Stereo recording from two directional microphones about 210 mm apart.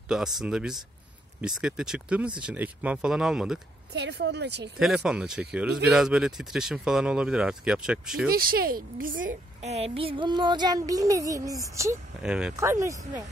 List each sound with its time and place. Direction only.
0.1 s speech: centre (ahead or behind)
3.9 s a woman's voice: 55° right (ahead or behind)
4.7 s speech: 5° right (ahead or behind)
8.3 s a woman's voice: 45° right (ahead or behind)
9.6 s speech: 30° right (ahead or behind); by 12.5 s 5° right (ahead or behind)
12.5 s speech: 15° right (ahead or behind)